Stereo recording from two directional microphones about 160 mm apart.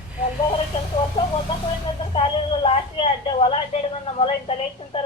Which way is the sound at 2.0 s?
30° left (ahead or behind).